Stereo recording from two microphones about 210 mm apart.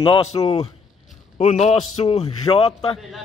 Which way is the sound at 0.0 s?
30° left (ahead or behind).